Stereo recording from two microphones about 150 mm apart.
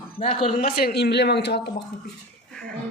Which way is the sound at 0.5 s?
80° left.